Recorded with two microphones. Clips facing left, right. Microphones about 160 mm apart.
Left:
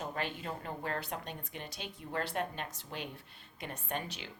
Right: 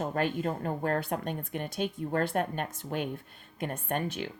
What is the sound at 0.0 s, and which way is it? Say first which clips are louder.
Speech: right 9 dB; 50° right (ahead or behind).